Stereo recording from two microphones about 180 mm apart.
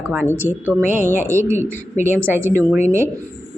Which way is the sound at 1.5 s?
10° right (ahead or behind).